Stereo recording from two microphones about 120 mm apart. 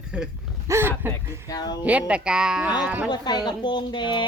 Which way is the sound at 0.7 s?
20° right (ahead or behind).